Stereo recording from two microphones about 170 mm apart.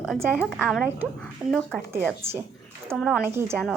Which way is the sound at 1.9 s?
10° right (ahead or behind).